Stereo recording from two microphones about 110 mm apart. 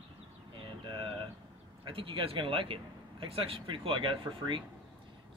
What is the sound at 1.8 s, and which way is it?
Speech, 55° right (ahead or behind).